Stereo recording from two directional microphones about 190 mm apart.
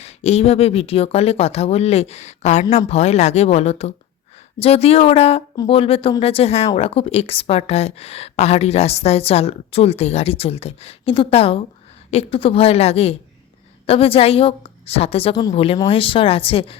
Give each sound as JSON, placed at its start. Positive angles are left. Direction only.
{"t": 0.0, "sound": "a woman's voice", "side_deg": 35}